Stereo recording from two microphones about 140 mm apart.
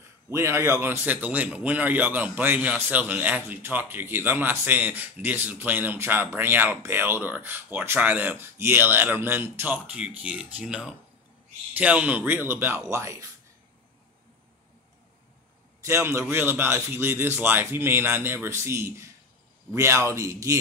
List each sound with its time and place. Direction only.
0.3 s speech: 20° right (ahead or behind)
15.8 s a man's voice: 20° right (ahead or behind)